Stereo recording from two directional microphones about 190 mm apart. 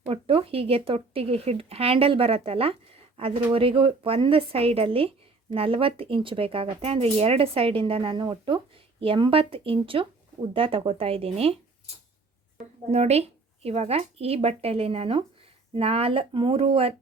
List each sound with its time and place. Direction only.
0.1 s speech: 30° right (ahead or behind)
12.9 s speech: 35° right (ahead or behind)